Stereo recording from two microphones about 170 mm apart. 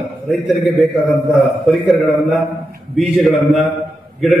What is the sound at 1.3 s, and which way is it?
A man's voice, centre (ahead or behind).